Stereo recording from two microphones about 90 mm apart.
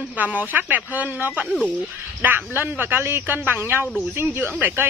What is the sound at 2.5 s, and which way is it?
Speech, 20° right (ahead or behind).